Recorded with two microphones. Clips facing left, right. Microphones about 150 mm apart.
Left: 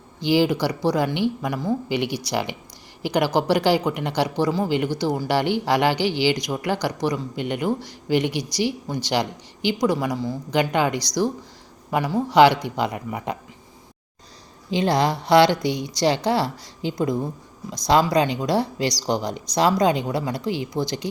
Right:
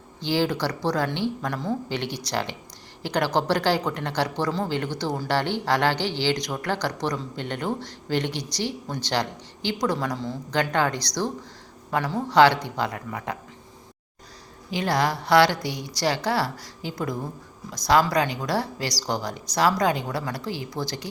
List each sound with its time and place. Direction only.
0.2 s speech: 15° left (ahead or behind)
14.7 s speech: 20° left (ahead or behind)